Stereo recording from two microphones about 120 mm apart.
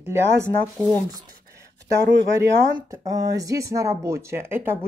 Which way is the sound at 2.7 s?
30° right (ahead or behind).